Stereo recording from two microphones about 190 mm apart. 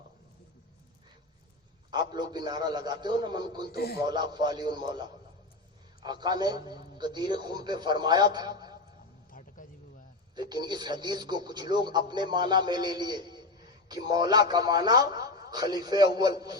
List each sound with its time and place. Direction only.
1.9 s a man's voice: 25° right (ahead or behind)
3.8 s speech: 55° left (ahead or behind)
4.1 s a man's voice: 25° right (ahead or behind)
9.6 s a sound: 45° left (ahead or behind)
10.3 s a man's voice: 20° right (ahead or behind)